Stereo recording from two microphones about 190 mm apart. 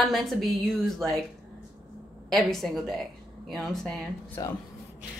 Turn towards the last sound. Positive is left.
turn(degrees=20)  # may be behind; listen again after turning